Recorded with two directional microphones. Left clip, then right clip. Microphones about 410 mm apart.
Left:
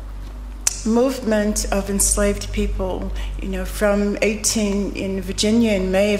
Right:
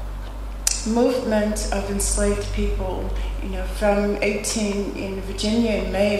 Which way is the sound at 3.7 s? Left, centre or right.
Left.